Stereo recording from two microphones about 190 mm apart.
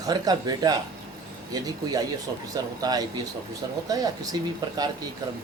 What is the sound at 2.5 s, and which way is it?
Speech, 20° right (ahead or behind).